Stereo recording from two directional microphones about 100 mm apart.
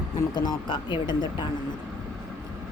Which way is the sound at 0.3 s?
45° left (ahead or behind).